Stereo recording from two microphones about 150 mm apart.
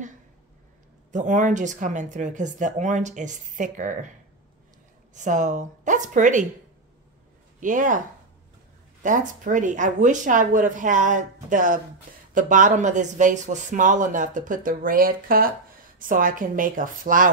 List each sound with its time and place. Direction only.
1.1 s speech: 55° right (ahead or behind)
5.1 s speech: 55° right (ahead or behind)
7.6 s speech: 60° right (ahead or behind)
9.0 s speech: 60° right (ahead or behind)